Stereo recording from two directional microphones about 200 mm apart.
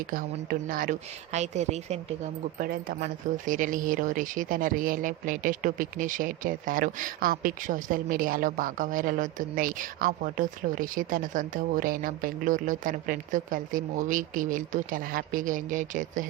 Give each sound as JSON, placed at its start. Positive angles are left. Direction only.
{"t": 0.7, "sound": "speech", "side_deg": -40}